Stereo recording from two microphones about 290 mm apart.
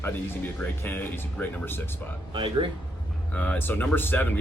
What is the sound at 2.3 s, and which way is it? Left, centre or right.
Speech, centre.